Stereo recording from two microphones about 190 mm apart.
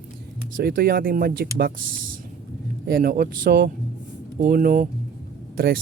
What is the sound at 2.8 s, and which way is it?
Speech, 50° right (ahead or behind).